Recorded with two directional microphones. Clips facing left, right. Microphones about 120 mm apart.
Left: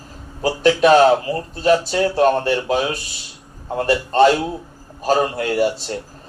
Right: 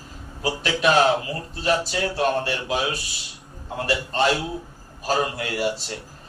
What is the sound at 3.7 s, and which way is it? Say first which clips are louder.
Speech: left 8 dB; 40° left (ahead or behind).